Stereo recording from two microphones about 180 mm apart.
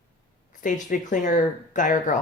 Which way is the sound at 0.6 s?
45° left (ahead or behind).